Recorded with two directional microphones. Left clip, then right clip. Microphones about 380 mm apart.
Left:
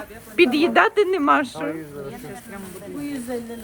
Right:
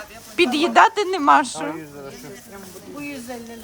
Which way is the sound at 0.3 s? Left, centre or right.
Centre.